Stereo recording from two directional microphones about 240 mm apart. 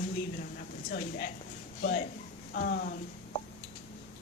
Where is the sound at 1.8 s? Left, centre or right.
Left.